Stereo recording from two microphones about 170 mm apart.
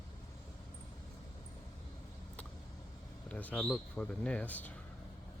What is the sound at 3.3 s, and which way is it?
Speech, 10° left (ahead or behind).